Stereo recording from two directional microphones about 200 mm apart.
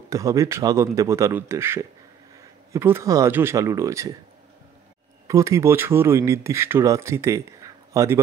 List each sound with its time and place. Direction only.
0.1 s speech: 15° right (ahead or behind)
5.3 s speech: 15° right (ahead or behind)